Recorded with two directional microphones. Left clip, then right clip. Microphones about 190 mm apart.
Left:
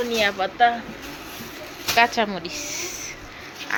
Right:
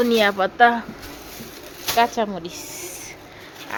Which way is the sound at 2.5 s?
30° right (ahead or behind).